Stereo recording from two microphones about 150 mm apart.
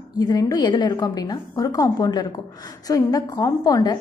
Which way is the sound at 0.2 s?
25° left (ahead or behind).